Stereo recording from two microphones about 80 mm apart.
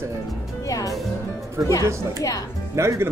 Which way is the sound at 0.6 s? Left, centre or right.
Left.